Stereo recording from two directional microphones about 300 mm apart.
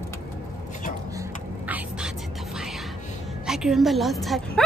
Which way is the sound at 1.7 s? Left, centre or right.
Centre.